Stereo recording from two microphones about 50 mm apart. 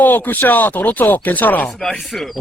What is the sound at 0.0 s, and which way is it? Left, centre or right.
Speech, left.